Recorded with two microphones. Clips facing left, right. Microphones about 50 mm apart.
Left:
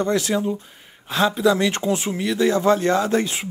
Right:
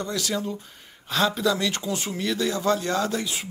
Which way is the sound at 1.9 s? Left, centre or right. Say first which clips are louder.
Left 5 dB; left.